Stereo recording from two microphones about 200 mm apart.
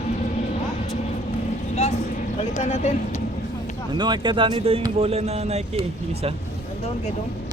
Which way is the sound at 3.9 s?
20° right (ahead or behind).